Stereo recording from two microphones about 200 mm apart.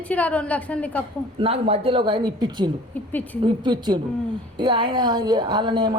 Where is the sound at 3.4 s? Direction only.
20° right (ahead or behind).